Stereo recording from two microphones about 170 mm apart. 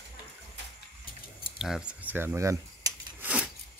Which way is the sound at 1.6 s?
5° right (ahead or behind).